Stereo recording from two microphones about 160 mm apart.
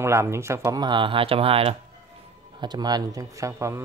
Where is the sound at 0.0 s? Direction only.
15° right (ahead or behind); by 1.8 s 35° right (ahead or behind).